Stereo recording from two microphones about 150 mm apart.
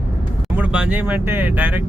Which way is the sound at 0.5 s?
10° right (ahead or behind).